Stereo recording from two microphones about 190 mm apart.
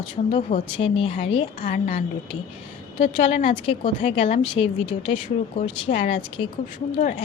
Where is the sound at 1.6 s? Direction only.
45° left (ahead or behind).